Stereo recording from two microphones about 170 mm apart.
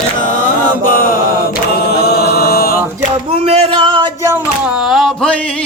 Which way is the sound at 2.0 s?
70° left (ahead or behind).